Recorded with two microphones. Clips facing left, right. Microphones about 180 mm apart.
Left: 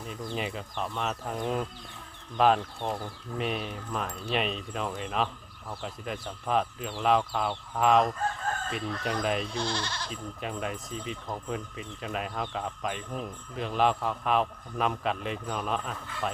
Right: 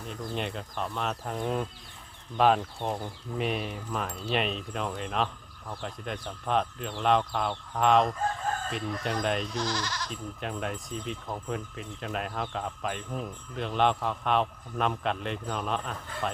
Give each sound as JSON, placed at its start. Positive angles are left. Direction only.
{"t": 0.1, "sound": "speech", "side_deg": 5}
{"t": 9.5, "sound": "speech", "side_deg": 30}
{"t": 10.1, "sound": "speech", "side_deg": 0}